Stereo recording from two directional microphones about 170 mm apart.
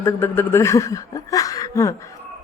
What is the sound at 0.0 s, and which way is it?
Speech, 15° left (ahead or behind).